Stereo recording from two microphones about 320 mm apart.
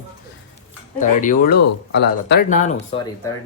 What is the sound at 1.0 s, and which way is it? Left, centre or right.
Speech, left.